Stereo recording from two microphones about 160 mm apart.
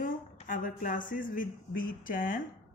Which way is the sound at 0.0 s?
55° left (ahead or behind).